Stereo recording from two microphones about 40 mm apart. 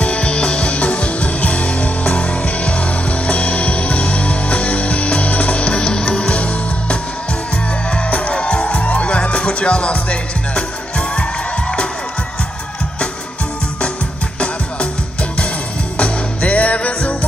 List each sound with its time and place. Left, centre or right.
0.0 s music: left
8.1 s music: left
16.0 s music: left